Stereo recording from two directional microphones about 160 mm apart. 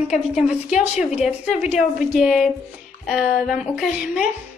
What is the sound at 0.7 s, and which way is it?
Speech, 45° left (ahead or behind).